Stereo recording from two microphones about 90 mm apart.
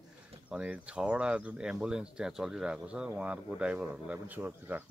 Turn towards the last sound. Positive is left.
turn(degrees=-20)  # may be behind; listen again after turning